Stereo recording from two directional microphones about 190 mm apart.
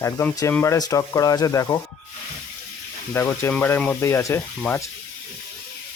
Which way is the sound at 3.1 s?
10° left (ahead or behind).